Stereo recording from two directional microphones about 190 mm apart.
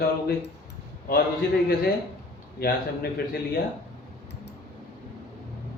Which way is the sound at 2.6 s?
55° left (ahead or behind).